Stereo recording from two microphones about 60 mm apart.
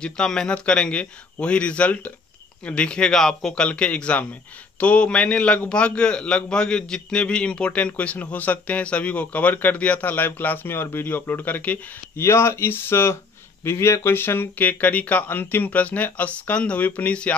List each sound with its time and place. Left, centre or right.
0.0 s a man's voice: centre
3.6 s a man's voice: centre
12.2 s speech: left